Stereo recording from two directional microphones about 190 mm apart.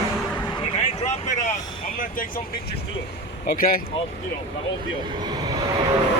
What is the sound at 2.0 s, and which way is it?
Speech, 45° left (ahead or behind).